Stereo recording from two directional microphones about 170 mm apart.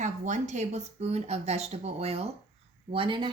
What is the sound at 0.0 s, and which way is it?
A woman's voice, 45° right (ahead or behind).